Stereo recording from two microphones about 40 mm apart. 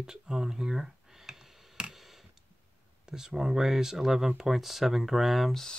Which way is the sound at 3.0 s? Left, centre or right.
Centre.